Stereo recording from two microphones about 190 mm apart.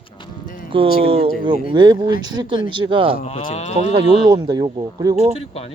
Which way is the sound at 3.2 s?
35° left (ahead or behind).